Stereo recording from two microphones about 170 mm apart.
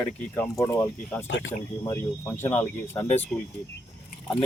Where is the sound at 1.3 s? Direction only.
90° left.